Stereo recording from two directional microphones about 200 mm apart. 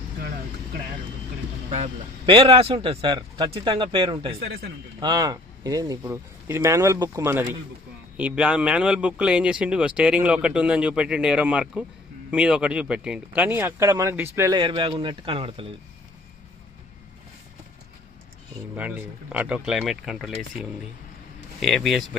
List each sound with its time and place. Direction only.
1.7 s a man's voice: 30° right (ahead or behind)
18.8 s speech: 10° right (ahead or behind)